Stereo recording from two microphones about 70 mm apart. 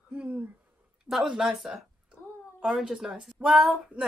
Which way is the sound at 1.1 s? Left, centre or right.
Centre.